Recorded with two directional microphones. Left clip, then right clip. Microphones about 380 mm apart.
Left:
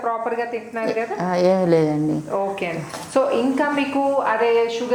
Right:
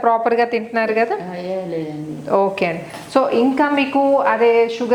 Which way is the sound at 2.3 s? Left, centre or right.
Right.